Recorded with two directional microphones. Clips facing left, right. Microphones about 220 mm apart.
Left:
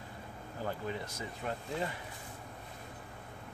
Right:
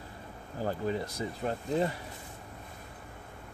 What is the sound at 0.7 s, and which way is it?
Speech, 35° right (ahead or behind).